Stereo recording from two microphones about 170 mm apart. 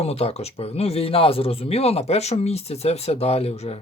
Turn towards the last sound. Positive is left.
turn(degrees=40)  # may be behind; listen again after turning